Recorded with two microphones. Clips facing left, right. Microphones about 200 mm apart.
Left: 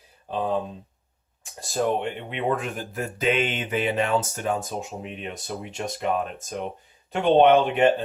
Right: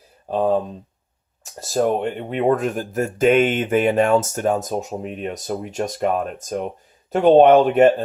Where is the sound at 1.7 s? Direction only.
40° right (ahead or behind).